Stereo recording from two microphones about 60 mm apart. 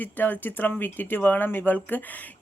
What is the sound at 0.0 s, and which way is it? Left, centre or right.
A woman's voice, left.